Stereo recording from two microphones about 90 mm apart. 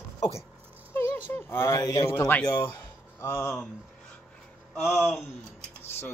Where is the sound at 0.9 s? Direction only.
25° left (ahead or behind).